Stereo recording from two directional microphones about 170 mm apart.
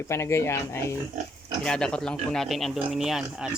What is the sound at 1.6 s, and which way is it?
Speech, 5° left (ahead or behind).